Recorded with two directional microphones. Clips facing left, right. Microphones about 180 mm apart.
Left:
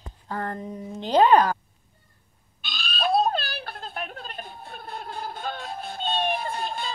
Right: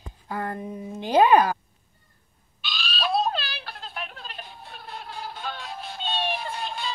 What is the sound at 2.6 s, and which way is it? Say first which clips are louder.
Owl: left 1 dB; 50° left (ahead or behind).